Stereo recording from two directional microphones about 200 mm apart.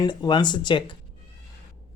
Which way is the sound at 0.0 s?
20° left (ahead or behind).